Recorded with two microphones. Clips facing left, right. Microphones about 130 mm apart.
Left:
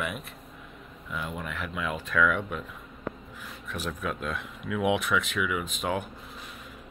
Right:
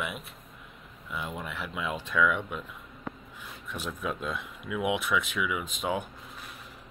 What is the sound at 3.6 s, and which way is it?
Speech, 20° right (ahead or behind).